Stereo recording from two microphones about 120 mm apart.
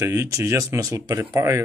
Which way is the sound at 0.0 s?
25° right (ahead or behind).